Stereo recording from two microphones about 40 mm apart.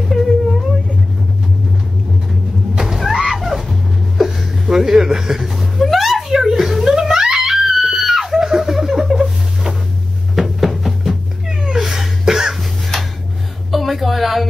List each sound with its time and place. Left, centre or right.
2.8 s music: centre
4.2 s chuckle: centre
6.8 s giggle: centre
7.3 s screaming: centre
10.3 s cat: centre
13.7 s a sound: centre